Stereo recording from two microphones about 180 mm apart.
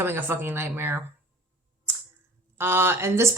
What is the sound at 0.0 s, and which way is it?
Speech, 10° right (ahead or behind).